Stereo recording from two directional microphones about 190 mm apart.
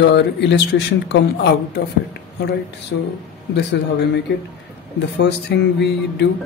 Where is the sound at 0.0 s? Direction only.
65° left (ahead or behind).